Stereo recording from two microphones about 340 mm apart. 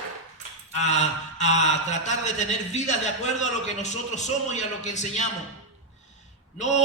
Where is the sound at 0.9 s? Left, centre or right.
Centre.